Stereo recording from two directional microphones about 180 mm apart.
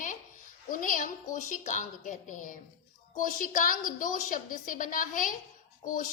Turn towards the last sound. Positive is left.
turn(degrees=50)  # may be behind; listen again after turning